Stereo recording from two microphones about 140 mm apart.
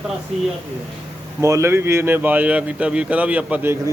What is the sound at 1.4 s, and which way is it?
Speech, 20° right (ahead or behind).